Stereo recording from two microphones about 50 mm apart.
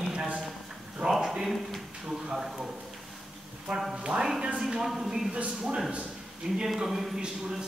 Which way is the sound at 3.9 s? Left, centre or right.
Centre.